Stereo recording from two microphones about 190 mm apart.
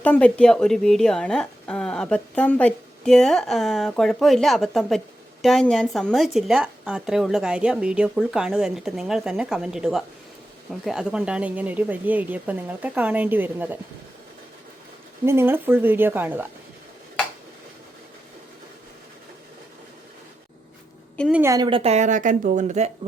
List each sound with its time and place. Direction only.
0.0 s a woman's voice: 5° left (ahead or behind); by 13.7 s 10° right (ahead or behind)
15.2 s a woman's voice: 10° right (ahead or behind)
21.2 s a woman's voice: centre (ahead or behind)
21.4 s a woman's voice: 20° right (ahead or behind); by 22.9 s 35° right (ahead or behind)